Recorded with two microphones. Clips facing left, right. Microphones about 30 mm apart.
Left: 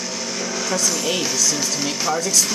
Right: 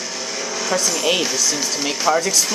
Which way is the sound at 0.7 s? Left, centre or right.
Centre.